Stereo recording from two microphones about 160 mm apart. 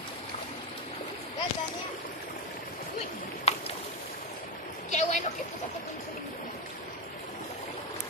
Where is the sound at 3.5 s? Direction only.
45° left (ahead or behind).